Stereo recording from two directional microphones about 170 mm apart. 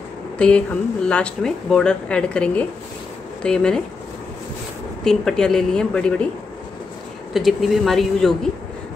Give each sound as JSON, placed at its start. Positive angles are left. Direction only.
{"t": 0.4, "sound": "speech", "side_deg": 5}
{"t": 5.0, "sound": "speech", "side_deg": 5}
{"t": 7.3, "sound": "speech", "side_deg": 0}